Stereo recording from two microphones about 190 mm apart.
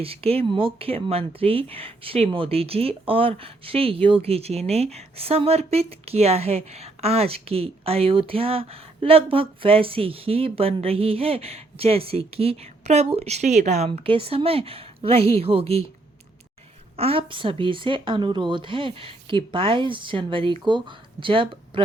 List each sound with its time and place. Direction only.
0.0 s speech: 30° right (ahead or behind)
17.0 s speech: 30° right (ahead or behind)